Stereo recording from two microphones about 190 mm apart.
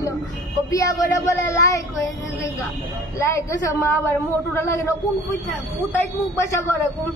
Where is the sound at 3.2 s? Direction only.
15° left (ahead or behind).